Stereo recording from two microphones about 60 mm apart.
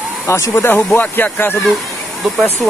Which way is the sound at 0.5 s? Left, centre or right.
Left.